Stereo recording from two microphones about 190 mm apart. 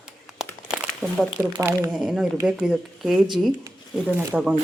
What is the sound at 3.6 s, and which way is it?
Speech, 15° right (ahead or behind).